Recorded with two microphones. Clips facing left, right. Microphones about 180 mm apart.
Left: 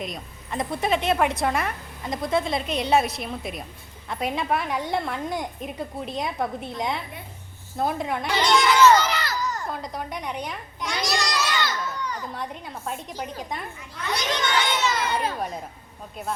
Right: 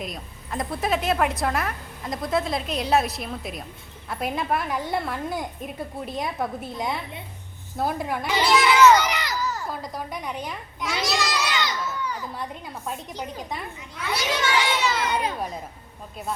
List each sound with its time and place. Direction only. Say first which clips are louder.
0.0 s a woman's voice: left 1 dB; centre (ahead or behind)
9.0 s a sound: even; 15° right (ahead or behind)
11.9 s speech: right 1 dB; 10° right (ahead or behind)
14.8 s crowd: even; centre (ahead or behind)
15.1 s speech: even; 15° right (ahead or behind)
15.4 s a woman's voice: left 1 dB; centre (ahead or behind)